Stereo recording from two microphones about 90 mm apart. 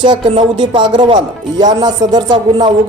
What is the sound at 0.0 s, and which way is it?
Speech, 65° right (ahead or behind).